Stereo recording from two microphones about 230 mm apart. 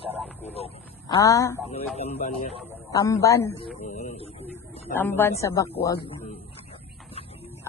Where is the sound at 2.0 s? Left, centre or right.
Left.